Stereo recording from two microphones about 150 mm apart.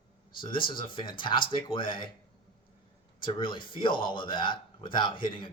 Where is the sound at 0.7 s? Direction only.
35° left (ahead or behind).